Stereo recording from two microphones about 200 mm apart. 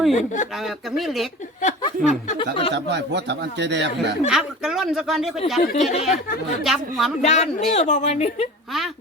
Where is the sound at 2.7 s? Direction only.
60° right (ahead or behind).